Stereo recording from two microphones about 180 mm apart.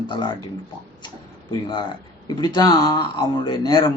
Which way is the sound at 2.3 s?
25° left (ahead or behind).